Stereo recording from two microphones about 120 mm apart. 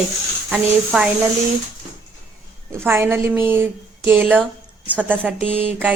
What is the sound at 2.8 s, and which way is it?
A woman's voice, 20° right (ahead or behind).